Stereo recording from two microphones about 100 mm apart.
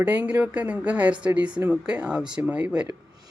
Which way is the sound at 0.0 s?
15° right (ahead or behind).